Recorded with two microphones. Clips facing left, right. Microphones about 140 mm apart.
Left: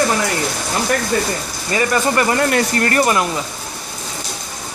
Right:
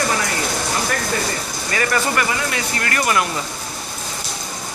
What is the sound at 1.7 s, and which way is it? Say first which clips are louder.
Speech: left 4 dB; 25° left (ahead or behind).